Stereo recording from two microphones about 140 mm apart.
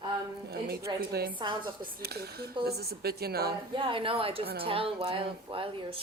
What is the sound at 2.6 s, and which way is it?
Speech, 90° right.